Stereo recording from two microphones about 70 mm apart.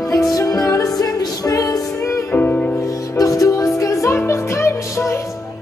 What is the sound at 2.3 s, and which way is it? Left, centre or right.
Music, left.